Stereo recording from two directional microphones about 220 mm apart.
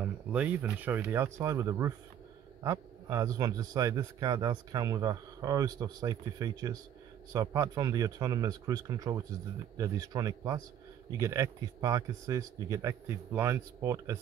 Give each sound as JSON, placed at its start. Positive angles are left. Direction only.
{"t": 0.0, "sound": "a man's voice", "side_deg": -5}